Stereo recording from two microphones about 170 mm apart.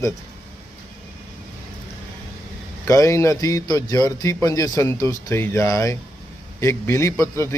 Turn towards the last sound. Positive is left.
turn(degrees=15)  # may be behind; listen again after turning